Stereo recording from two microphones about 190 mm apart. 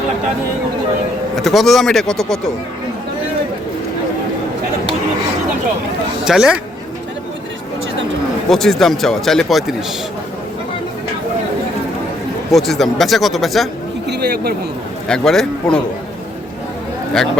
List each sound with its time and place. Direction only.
1.4 s speech: centre (ahead or behind)
6.2 s speech: 5° right (ahead or behind)
8.4 s speech: centre (ahead or behind)
12.5 s speech: centre (ahead or behind)
14.1 s speech: 60° right (ahead or behind)
15.0 s speech: 5° left (ahead or behind)